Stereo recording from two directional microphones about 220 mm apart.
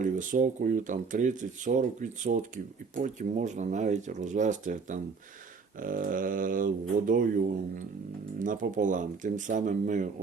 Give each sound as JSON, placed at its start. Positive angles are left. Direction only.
{"t": 0.0, "sound": "speech", "side_deg": -35}